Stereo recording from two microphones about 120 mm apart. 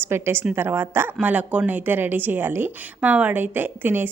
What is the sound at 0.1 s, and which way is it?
A woman's voice, 20° right (ahead or behind).